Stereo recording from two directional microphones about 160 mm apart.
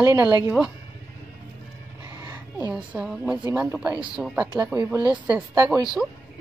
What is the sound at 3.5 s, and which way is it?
Speech, 20° right (ahead or behind).